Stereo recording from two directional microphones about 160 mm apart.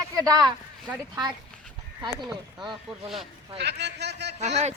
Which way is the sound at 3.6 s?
90° right.